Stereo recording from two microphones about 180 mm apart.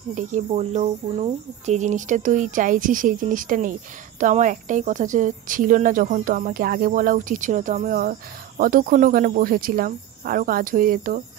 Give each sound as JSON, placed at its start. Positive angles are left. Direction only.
{"t": 0.1, "sound": "speech", "side_deg": -40}